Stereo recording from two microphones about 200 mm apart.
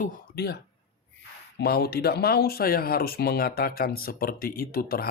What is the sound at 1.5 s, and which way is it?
Speech, 50° left (ahead or behind).